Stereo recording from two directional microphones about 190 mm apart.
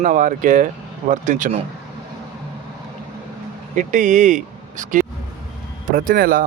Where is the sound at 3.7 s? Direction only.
40° right (ahead or behind).